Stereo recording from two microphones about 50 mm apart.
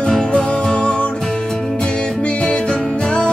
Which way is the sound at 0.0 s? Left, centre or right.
Centre.